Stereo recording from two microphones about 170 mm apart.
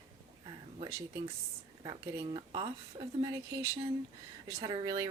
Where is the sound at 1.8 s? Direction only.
30° right (ahead or behind).